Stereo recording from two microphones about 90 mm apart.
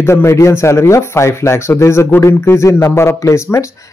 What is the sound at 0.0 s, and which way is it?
Speech, 30° left (ahead or behind).